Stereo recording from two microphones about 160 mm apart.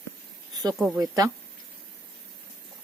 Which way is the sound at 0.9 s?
20° right (ahead or behind).